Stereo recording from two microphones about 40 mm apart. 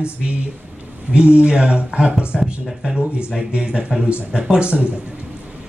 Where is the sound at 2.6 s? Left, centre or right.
Centre.